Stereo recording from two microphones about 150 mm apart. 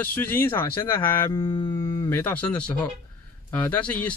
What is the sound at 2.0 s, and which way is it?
Speech, 10° left (ahead or behind).